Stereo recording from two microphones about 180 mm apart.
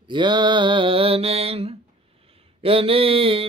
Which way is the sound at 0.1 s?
25° right (ahead or behind).